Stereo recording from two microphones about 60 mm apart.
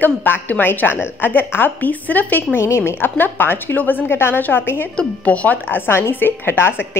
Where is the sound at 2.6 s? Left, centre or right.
Left.